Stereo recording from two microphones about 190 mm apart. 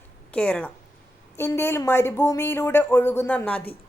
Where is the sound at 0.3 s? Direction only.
5° left (ahead or behind).